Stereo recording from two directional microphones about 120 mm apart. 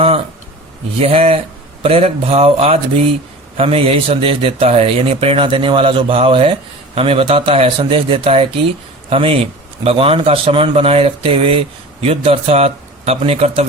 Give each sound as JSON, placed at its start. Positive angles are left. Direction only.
{"t": 1.0, "sound": "a man's voice", "side_deg": -55}